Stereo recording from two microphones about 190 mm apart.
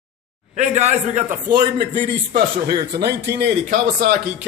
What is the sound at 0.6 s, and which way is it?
Speech, 35° right (ahead or behind).